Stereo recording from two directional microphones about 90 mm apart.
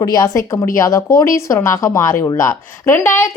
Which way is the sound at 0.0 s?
35° left (ahead or behind).